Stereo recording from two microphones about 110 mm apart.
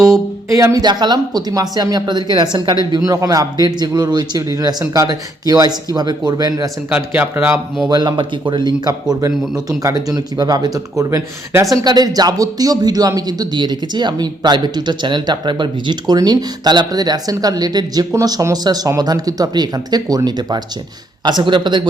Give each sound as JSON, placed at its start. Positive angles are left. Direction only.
{"t": 0.5, "sound": "speech", "side_deg": -30}
{"t": 0.9, "sound": "speech", "side_deg": -40}
{"t": 6.9, "sound": "speech", "side_deg": -15}
{"t": 7.9, "sound": "a man's voice", "side_deg": -40}